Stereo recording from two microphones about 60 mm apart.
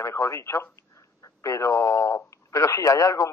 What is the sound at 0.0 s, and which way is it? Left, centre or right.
Speech, left.